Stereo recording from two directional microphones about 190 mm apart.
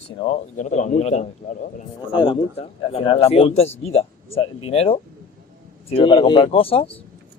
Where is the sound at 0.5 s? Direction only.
40° left (ahead or behind).